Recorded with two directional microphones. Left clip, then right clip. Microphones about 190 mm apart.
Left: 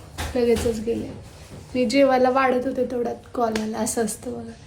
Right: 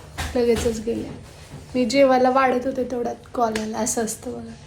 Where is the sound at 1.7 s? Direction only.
10° left (ahead or behind).